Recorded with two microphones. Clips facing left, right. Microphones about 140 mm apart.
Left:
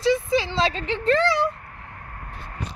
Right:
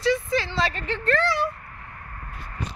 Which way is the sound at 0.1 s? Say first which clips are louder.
Left 4 dB; 20° left (ahead or behind).